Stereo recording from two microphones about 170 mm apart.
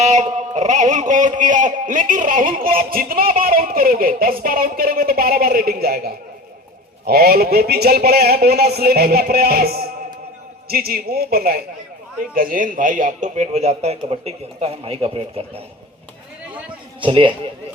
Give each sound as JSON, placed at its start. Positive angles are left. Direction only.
{"t": 0.0, "sound": "a man's voice", "side_deg": -45}
{"t": 17.0, "sound": "a man's voice", "side_deg": -30}